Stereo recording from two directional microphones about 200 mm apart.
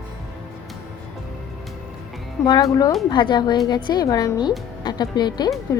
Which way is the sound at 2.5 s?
20° left (ahead or behind).